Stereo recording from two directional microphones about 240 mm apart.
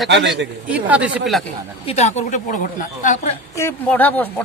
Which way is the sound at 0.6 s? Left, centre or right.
Centre.